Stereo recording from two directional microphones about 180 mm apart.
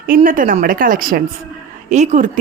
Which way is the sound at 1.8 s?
40° right (ahead or behind).